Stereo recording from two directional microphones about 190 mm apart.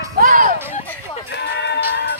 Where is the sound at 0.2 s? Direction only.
45° right (ahead or behind).